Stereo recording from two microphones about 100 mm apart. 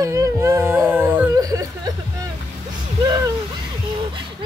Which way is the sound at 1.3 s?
35° right (ahead or behind).